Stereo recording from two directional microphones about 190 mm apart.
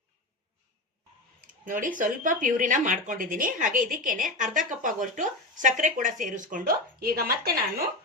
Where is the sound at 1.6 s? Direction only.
45° right (ahead or behind).